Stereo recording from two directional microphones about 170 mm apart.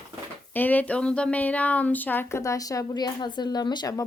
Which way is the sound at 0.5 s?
10° left (ahead or behind).